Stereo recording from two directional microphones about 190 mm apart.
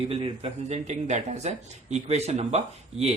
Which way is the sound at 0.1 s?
30° right (ahead or behind).